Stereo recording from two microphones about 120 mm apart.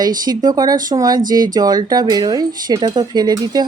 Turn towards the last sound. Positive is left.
turn(degrees=-35)  # may be behind; listen again after turning